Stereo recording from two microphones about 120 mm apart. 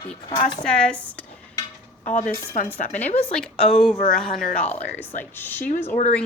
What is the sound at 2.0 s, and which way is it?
Speech, 90° left.